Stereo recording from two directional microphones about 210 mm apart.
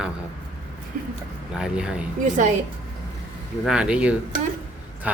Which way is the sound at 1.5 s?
5° right (ahead or behind).